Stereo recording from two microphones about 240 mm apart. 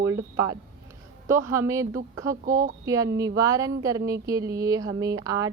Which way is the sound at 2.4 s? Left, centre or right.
Right.